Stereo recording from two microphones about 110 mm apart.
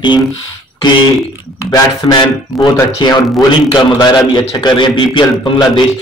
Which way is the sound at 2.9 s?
40° left (ahead or behind).